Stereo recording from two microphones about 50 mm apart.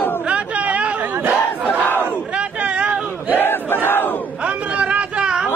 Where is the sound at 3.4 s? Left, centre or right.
Left.